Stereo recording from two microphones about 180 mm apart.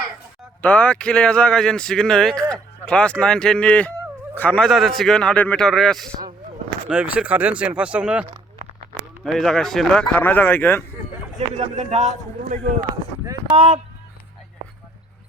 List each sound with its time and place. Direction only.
0.6 s speech: 5° left (ahead or behind)
11.3 s a man's voice: 35° right (ahead or behind)
13.2 s speech: 20° right (ahead or behind)